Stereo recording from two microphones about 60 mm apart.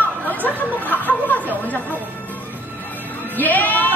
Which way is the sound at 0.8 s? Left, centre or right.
Left.